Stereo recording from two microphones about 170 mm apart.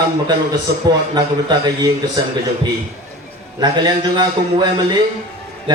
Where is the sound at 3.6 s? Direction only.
25° right (ahead or behind).